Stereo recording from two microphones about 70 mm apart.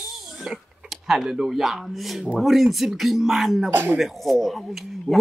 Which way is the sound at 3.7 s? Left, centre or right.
Right.